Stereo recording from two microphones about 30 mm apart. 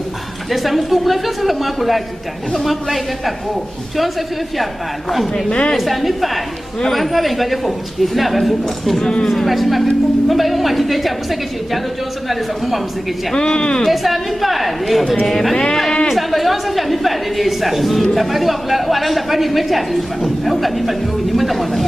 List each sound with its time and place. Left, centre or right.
0.5 s speech: centre
5.8 s speech: centre
13.4 s speech: left
13.8 s speech: centre